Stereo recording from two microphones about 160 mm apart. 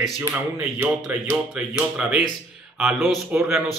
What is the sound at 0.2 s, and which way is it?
A man's voice, 10° right (ahead or behind).